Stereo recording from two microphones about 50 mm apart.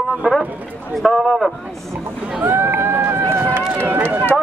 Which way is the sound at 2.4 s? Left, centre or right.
Right.